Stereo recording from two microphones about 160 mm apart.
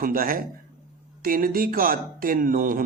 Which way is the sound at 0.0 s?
65° right (ahead or behind).